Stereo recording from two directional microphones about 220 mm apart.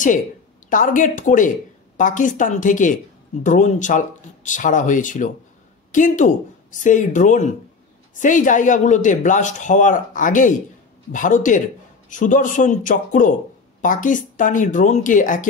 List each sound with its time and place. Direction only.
0.7 s speech: 35° left (ahead or behind)